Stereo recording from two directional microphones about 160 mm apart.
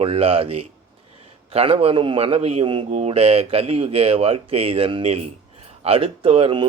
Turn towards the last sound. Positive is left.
turn(degrees=-35)  # may be behind; listen again after turning